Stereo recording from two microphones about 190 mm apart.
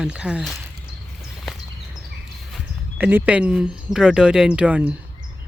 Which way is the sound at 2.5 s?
10° right (ahead or behind).